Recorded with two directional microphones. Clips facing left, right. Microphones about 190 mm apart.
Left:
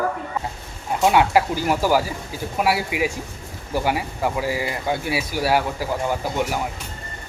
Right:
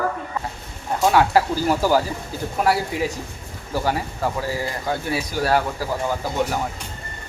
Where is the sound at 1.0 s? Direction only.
15° left (ahead or behind).